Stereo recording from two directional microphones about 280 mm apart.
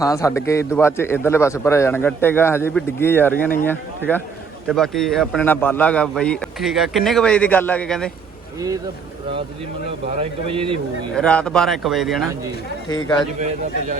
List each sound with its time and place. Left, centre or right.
0.0 s a man's voice: centre
10.1 s a man's voice: right
11.1 s a man's voice: centre